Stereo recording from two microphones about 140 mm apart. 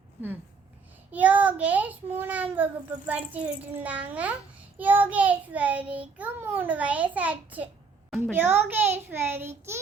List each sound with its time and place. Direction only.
1.1 s child singing: 10° right (ahead or behind)